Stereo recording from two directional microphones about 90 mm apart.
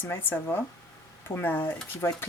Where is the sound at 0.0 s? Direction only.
25° left (ahead or behind).